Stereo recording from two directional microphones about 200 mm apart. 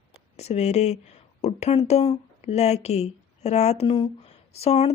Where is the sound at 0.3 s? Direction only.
35° left (ahead or behind).